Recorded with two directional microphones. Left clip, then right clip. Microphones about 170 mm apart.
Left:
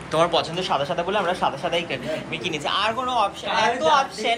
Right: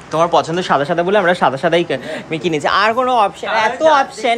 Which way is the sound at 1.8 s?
40° right (ahead or behind).